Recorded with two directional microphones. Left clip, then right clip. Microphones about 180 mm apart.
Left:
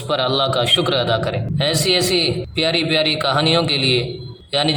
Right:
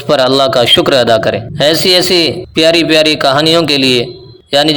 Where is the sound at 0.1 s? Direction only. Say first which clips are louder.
Right 9 dB; 35° right (ahead or behind).